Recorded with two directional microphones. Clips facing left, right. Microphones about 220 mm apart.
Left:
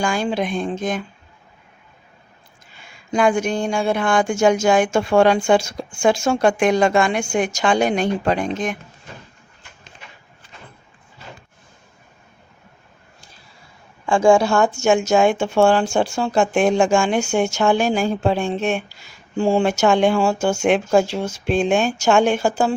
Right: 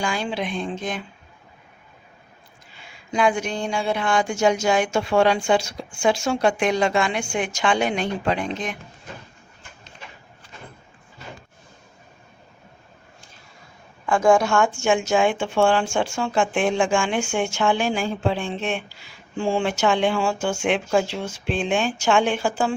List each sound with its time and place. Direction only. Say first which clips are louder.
0.0 s a woman's voice: left 5 dB; 45° left (ahead or behind)
3.1 s a woman's voice: left 4 dB; 45° left (ahead or behind)
14.1 s a woman's voice: left 3 dB; 30° left (ahead or behind)